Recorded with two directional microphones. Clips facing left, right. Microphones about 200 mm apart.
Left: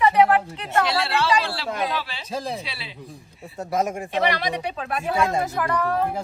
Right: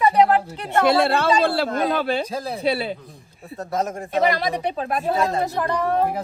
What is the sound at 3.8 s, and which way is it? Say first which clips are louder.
Speech: left 1 dB; 15° left (ahead or behind).